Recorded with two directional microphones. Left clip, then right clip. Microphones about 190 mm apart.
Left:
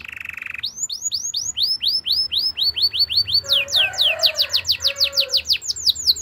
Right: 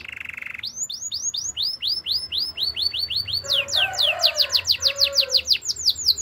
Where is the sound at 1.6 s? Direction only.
20° left (ahead or behind).